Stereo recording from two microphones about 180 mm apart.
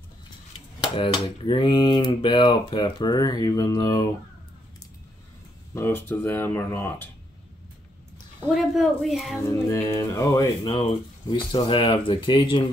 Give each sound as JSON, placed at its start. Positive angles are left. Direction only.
{"t": 0.7, "sound": "speech", "side_deg": 25}
{"t": 5.8, "sound": "speech", "side_deg": 10}
{"t": 8.5, "sound": "speech", "side_deg": 0}
{"t": 9.4, "sound": "speech", "side_deg": 15}